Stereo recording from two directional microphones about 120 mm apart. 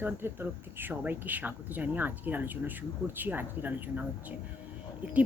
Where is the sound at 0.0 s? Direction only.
15° right (ahead or behind).